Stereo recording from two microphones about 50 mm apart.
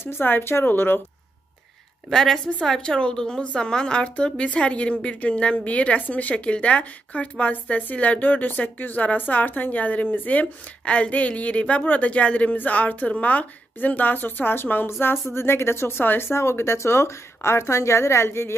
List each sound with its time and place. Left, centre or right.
0.0 s speech: left
2.0 s a woman's voice: centre; by 18.6 s left